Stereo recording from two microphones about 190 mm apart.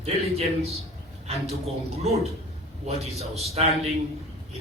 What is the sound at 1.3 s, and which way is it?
A man's voice, 30° right (ahead or behind).